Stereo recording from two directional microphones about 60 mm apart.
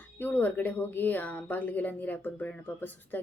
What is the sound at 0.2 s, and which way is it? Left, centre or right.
A woman's voice, left.